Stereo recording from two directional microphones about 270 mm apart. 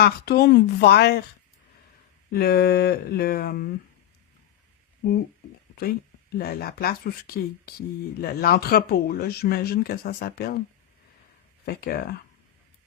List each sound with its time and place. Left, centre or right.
0.0 s speech: left
2.3 s speech: left
5.0 s speech: left
6.3 s speech: left
11.6 s speech: left